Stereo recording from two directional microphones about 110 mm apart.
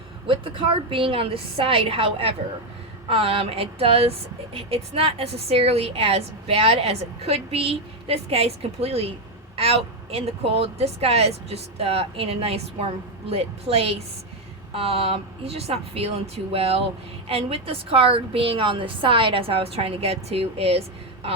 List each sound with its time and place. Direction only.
0.3 s speech: 55° right (ahead or behind)